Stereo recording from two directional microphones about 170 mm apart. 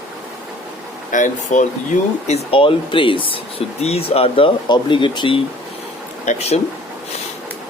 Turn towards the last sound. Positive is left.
turn(degrees=40)  # may be behind; listen again after turning